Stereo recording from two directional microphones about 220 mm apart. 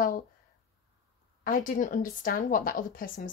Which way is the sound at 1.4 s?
35° left (ahead or behind).